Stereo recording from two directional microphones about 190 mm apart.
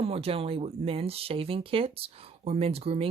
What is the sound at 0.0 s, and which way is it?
Speech, 30° right (ahead or behind).